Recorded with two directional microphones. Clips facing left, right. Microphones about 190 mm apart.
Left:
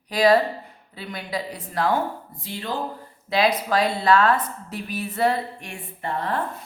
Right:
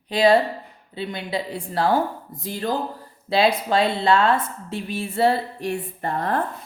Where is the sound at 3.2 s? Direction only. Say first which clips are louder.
Right 2 dB; 30° right (ahead or behind).